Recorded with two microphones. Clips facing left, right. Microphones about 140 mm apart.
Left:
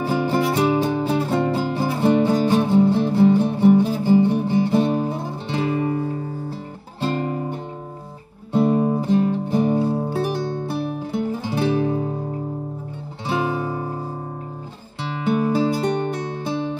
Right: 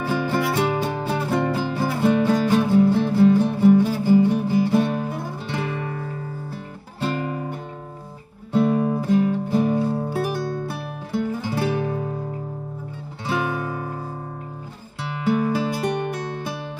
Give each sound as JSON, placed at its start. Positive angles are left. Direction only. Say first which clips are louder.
{"t": 0.0, "sound": "music", "louder": "left 2 dB", "side_deg": 30}
{"t": 0.9, "sound": "music", "louder": "left 3 dB", "side_deg": 20}
{"t": 7.0, "sound": "music", "louder": "left 2 dB", "side_deg": 35}
{"t": 8.5, "sound": "music", "louder": "left 2 dB", "side_deg": 30}
{"t": 13.3, "sound": "music", "louder": "left 2 dB", "side_deg": 30}
{"t": 15.5, "sound": "music", "louder": "left 3 dB", "side_deg": 30}